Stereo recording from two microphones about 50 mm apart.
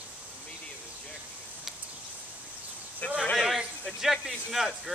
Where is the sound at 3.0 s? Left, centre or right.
Left.